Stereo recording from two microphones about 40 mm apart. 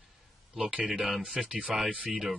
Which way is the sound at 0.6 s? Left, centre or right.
Right.